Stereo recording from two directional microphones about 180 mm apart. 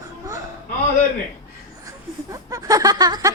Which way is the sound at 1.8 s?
20° right (ahead or behind).